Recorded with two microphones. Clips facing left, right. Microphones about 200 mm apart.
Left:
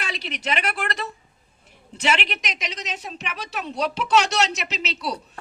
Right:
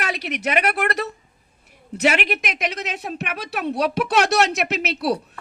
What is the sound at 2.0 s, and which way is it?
A woman's voice, 55° right (ahead or behind).